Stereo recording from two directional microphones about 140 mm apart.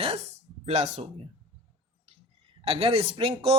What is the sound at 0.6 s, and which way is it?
Speech, 45° right (ahead or behind).